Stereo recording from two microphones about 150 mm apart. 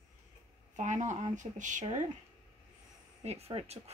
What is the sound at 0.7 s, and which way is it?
Speech, 55° right (ahead or behind).